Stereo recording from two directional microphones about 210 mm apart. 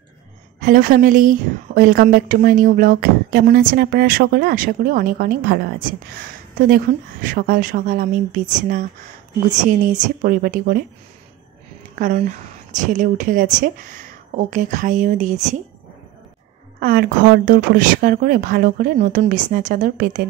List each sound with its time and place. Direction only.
0.6 s a woman's voice: 40° right (ahead or behind)
9.9 s a woman's voice: 40° right (ahead or behind)
11.9 s a woman's voice: 35° right (ahead or behind)
16.8 s speech: 40° right (ahead or behind)